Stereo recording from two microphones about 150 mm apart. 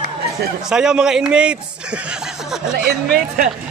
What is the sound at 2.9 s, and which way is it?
Speech, 90° right.